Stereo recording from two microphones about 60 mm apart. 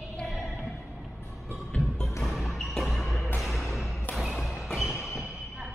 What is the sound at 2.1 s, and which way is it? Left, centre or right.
Music, centre.